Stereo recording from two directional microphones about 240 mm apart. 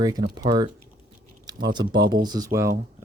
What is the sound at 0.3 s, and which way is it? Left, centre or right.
Speech, centre.